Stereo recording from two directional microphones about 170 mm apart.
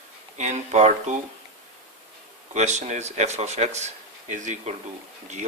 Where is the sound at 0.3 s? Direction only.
45° right (ahead or behind).